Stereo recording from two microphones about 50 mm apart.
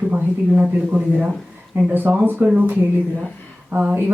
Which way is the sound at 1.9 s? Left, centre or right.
Right.